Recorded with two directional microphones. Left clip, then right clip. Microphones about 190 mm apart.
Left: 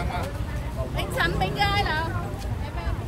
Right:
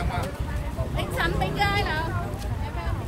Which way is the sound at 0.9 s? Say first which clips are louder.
Left 1 dB; 55° left (ahead or behind).